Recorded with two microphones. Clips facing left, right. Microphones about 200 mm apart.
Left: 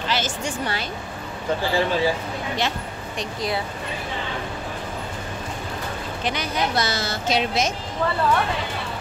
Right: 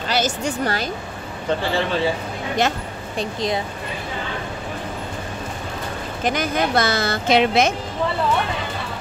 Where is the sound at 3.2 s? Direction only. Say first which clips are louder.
Right 4 dB; 20° right (ahead or behind).